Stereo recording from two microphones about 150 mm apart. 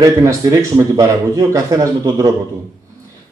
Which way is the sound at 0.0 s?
20° right (ahead or behind).